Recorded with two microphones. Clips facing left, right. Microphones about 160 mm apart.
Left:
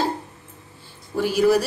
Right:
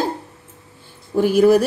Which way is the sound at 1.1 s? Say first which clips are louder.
Right 5 dB; 50° right (ahead or behind).